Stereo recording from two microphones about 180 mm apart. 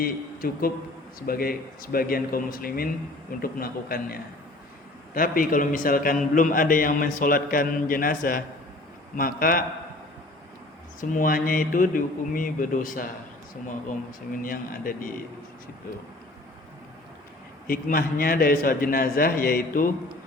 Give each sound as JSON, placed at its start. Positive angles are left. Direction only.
{"t": 0.0, "sound": "a man's voice", "side_deg": 55}
{"t": 11.0, "sound": "a man's voice", "side_deg": 50}
{"t": 14.4, "sound": "a man's voice", "side_deg": 50}
{"t": 17.7, "sound": "a man's voice", "side_deg": 50}